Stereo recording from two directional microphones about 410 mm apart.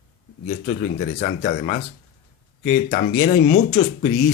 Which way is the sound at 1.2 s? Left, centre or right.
Centre.